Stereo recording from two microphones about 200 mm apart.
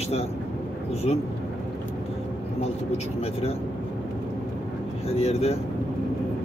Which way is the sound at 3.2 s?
30° left (ahead or behind).